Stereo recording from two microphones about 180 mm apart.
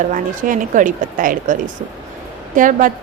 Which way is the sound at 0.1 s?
45° right (ahead or behind).